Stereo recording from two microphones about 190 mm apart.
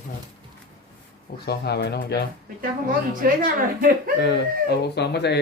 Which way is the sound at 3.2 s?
45° right (ahead or behind).